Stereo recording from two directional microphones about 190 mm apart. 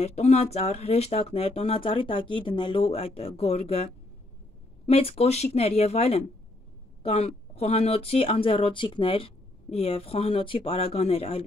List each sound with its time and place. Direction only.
0.0 s speech: 35° left (ahead or behind)